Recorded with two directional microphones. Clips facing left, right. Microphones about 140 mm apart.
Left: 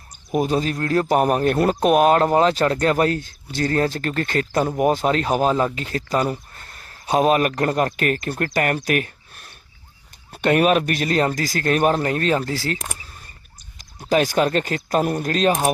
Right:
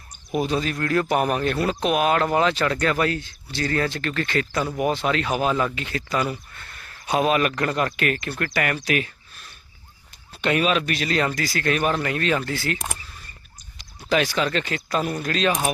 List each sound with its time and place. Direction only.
0.3 s speech: 45° left (ahead or behind)